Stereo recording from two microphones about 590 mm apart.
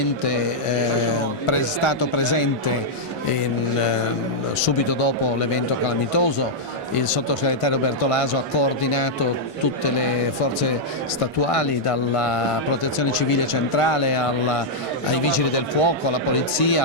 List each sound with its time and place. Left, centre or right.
1.5 s speech: left
4.6 s speech: left
11.5 s speech: left